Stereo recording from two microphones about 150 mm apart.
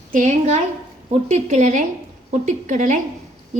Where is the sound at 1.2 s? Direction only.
50° right (ahead or behind).